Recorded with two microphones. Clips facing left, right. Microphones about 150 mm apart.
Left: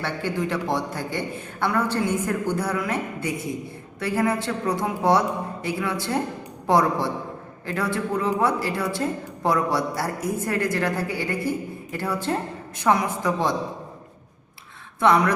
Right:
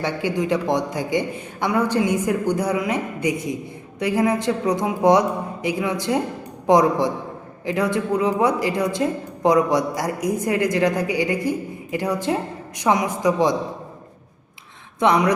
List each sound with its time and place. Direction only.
0.0 s a woman's voice: 15° right (ahead or behind)
14.9 s speech: 20° right (ahead or behind)